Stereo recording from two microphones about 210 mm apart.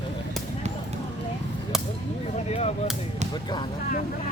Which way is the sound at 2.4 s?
30° left (ahead or behind).